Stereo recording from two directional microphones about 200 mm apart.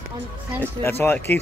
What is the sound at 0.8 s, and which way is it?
Speech, 10° left (ahead or behind).